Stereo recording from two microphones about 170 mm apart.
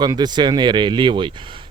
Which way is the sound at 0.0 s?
25° right (ahead or behind).